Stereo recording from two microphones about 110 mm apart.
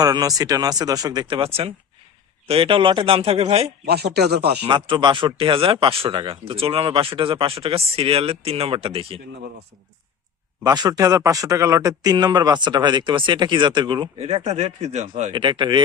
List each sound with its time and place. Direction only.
0.0 s speech: 35° right (ahead or behind)
1.4 s speech: 60° right (ahead or behind)
4.6 s speech: 45° right (ahead or behind)
10.6 s speech: 35° right (ahead or behind)
14.2 s speech: 70° right (ahead or behind); by 15.3 s 90° right
15.3 s speech: 45° right (ahead or behind)